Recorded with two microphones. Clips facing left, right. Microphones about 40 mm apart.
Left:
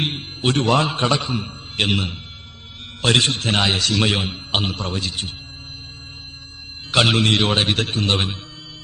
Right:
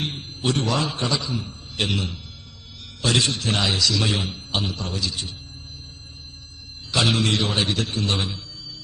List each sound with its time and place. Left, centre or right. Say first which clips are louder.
0.0 s a man's voice: left 4 dB; left
6.9 s a man's voice: left 4 dB; left